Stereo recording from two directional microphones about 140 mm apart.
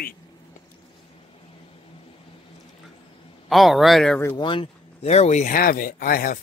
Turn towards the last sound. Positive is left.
turn(degrees=90)